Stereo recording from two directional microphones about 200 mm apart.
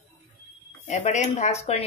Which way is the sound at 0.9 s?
35° left (ahead or behind).